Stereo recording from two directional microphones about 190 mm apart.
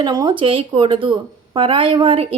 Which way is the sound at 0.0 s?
25° right (ahead or behind).